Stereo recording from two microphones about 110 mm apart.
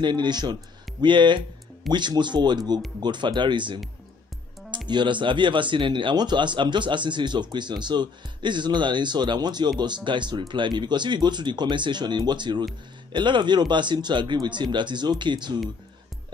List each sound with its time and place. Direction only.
0.0 s speech: 45° right (ahead or behind)